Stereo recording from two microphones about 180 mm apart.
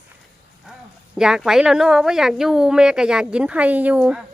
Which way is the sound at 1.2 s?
5° right (ahead or behind).